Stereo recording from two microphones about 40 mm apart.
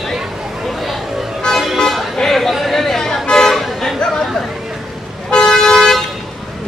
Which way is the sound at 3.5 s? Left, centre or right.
Centre.